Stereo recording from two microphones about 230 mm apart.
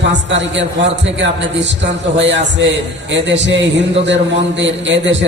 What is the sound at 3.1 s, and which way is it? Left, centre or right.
A man's voice, right.